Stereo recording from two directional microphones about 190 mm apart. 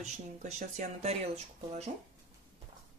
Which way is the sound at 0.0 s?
40° right (ahead or behind).